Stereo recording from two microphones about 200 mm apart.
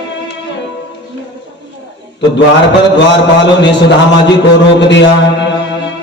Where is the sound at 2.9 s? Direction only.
60° left (ahead or behind).